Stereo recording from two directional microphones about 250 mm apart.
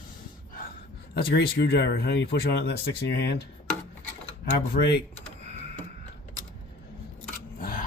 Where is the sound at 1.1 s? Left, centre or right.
Left.